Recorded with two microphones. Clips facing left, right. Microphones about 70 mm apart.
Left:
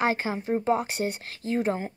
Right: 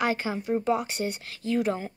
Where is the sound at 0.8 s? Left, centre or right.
Left.